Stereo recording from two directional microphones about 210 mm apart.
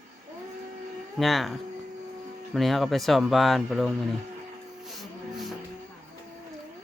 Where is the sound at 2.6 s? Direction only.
Centre (ahead or behind).